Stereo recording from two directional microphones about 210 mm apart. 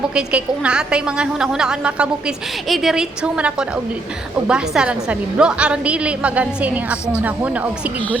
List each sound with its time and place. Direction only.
0.1 s a woman's voice: 5° right (ahead or behind)